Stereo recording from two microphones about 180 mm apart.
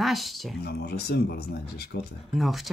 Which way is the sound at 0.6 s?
60° left (ahead or behind).